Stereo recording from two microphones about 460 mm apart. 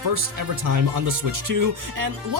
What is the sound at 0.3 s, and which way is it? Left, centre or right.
Speech, right.